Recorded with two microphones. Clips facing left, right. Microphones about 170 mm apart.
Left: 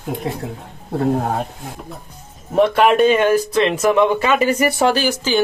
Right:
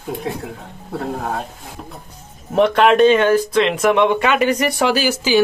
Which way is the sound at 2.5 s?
5° left (ahead or behind).